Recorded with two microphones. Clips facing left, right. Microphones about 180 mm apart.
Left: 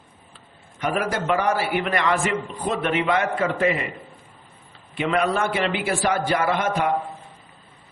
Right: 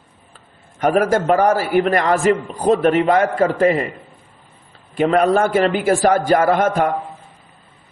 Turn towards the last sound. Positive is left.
turn(degrees=-45)  # may be behind; listen again after turning